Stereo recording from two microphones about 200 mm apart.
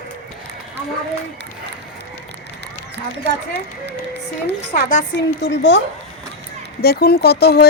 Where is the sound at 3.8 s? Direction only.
60° right (ahead or behind).